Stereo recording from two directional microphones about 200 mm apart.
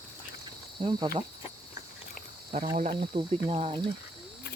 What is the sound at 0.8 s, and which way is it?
Speech, 20° right (ahead or behind).